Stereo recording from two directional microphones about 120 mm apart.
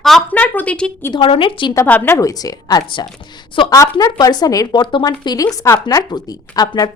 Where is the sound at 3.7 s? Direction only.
25° left (ahead or behind).